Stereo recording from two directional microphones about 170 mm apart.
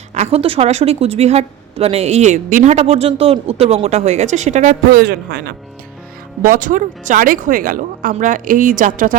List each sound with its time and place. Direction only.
0.1 s a woman's voice: 40° right (ahead or behind)
4.9 s speech: 70° right (ahead or behind)
6.4 s speech: 50° right (ahead or behind)